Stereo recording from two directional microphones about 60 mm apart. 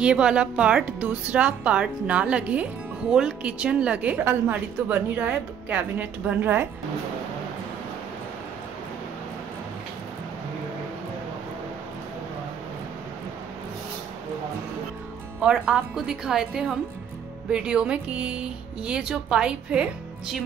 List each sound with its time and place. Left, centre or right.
0.0 s speech: centre
3.1 s speech: centre
4.2 s a woman's voice: right
15.4 s speech: centre